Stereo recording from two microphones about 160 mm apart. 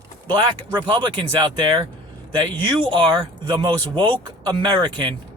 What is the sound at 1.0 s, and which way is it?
Speech, 30° right (ahead or behind).